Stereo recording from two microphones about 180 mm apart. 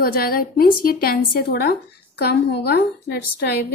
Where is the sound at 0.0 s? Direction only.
55° left (ahead or behind).